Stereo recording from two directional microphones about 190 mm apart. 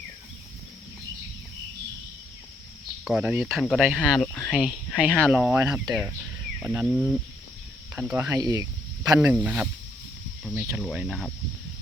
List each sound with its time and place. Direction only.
3.0 s speech: 5° right (ahead or behind)
6.8 s speech: centre (ahead or behind); by 8.6 s 20° right (ahead or behind)
9.2 s speech: 10° right (ahead or behind)